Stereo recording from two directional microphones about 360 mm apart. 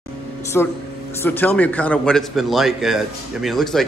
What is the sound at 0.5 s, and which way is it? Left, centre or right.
A man's voice, centre.